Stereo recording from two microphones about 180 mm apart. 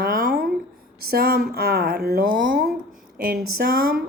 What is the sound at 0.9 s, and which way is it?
Speech, 55° right (ahead or behind).